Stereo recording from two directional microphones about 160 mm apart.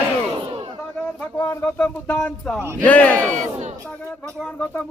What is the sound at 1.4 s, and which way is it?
Speech, 15° left (ahead or behind).